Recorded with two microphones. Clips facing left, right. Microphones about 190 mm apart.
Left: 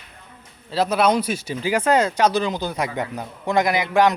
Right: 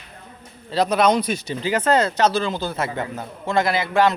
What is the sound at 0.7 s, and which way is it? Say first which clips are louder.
A man's voice: right 1 dB; 5° left (ahead or behind).